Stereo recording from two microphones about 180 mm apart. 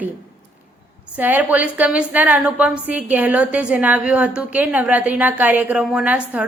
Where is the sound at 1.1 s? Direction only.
10° right (ahead or behind).